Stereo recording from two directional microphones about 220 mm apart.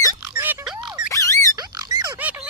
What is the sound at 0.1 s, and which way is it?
Pig, 10° right (ahead or behind).